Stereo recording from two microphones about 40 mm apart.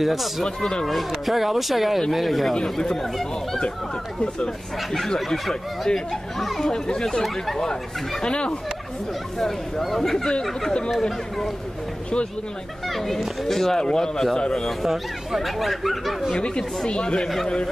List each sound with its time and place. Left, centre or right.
0.0 s a man's voice: centre
0.6 s speech: centre
0.8 s a man's voice: centre
2.5 s speech: centre
4.7 s speech: centre
6.3 s a man's voice: centre
6.6 s speech: centre
8.3 s speech: left
9.4 s speech: centre
12.8 s a man's voice: centre
16.3 s speech: left